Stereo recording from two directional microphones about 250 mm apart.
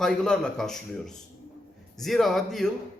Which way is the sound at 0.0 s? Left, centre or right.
Centre.